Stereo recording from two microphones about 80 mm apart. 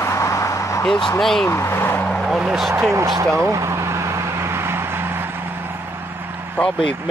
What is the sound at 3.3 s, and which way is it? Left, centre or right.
Vehicle, right.